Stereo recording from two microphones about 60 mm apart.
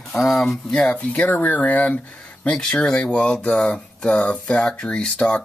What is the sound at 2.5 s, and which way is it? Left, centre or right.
Speech, centre.